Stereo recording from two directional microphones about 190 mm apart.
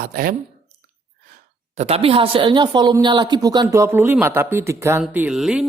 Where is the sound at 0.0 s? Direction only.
50° right (ahead or behind).